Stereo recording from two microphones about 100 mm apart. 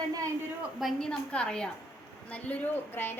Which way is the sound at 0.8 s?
5° left (ahead or behind).